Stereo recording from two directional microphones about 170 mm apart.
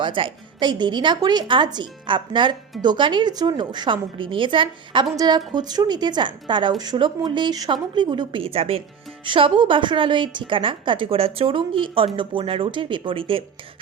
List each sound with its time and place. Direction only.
0.0 s a woman's voice: 30° right (ahead or behind)